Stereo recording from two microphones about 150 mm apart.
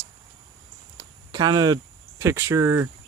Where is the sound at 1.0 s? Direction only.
25° right (ahead or behind).